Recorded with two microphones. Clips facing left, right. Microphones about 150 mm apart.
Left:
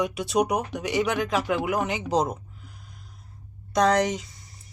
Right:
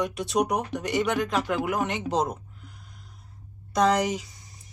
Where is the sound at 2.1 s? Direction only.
Centre (ahead or behind).